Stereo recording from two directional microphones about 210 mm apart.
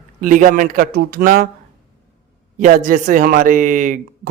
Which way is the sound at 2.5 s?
40° right (ahead or behind).